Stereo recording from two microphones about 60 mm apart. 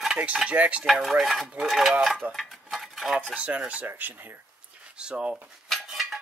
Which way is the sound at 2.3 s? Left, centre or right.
Centre.